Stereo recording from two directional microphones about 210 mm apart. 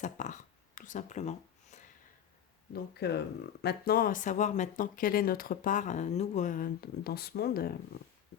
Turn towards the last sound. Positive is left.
turn(degrees=45)  # may be behind; listen again after turning